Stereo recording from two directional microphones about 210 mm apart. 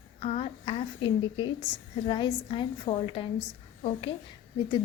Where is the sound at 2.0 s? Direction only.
25° left (ahead or behind).